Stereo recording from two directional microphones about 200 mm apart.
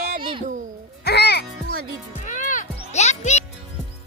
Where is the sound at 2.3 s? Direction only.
40° left (ahead or behind).